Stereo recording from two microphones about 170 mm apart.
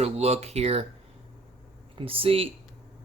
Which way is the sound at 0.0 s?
35° right (ahead or behind).